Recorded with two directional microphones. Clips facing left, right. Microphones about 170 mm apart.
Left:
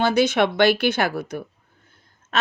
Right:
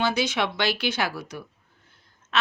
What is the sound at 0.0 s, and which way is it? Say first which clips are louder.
A woman's voice: left 7 dB; 50° left (ahead or behind).